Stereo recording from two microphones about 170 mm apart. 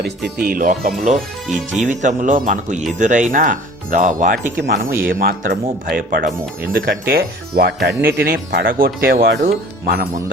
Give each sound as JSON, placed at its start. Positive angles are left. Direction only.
{"t": 0.3, "sound": "speech", "side_deg": -55}